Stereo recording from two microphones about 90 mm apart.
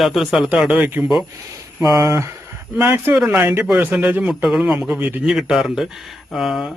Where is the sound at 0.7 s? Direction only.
20° right (ahead or behind).